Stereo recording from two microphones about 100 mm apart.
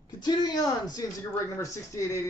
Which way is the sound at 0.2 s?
45° left (ahead or behind).